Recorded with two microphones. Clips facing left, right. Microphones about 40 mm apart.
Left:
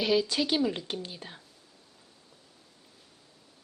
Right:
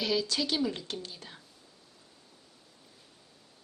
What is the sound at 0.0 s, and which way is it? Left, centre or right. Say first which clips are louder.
A woman's voice: left 4 dB; centre.